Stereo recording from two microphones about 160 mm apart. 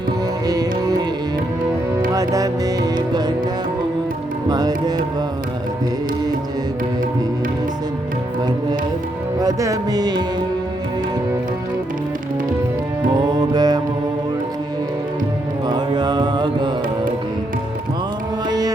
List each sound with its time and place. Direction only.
0.4 s music: 25° right (ahead or behind)
2.1 s music: 20° right (ahead or behind)
4.4 s music: 25° right (ahead or behind)
9.4 s music: 20° right (ahead or behind)
13.3 s music: 25° right (ahead or behind)
15.6 s music: 25° right (ahead or behind)
18.4 s music: 25° right (ahead or behind)